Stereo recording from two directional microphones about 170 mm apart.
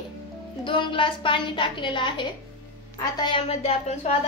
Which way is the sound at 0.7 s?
30° left (ahead or behind).